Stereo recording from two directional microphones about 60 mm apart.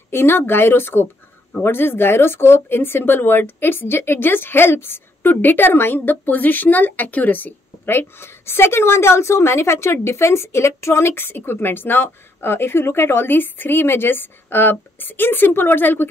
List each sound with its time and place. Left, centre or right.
0.1 s speech: left